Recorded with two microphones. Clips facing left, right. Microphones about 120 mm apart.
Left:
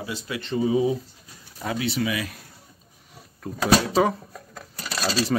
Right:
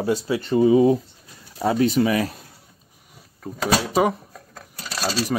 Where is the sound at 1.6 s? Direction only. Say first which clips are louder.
Right 7 dB; 40° right (ahead or behind).